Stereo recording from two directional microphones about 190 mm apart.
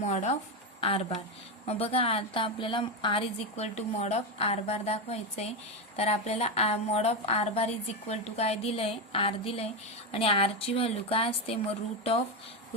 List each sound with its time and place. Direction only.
0.0 s a woman's voice: 40° left (ahead or behind)